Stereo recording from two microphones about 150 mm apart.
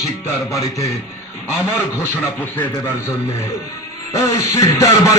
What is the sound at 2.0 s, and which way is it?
Speech, 15° left (ahead or behind).